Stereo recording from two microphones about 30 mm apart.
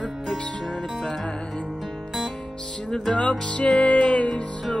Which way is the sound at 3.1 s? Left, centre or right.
Left.